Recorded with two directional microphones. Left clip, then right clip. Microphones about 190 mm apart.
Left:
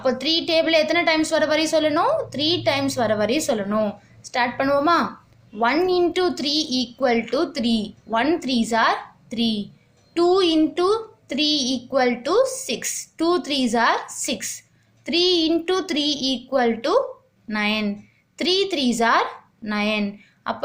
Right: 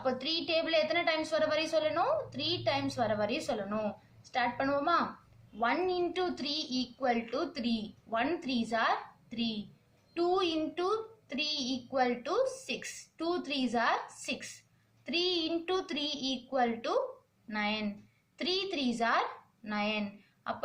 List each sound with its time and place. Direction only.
0.0 s a woman's voice: 45° left (ahead or behind)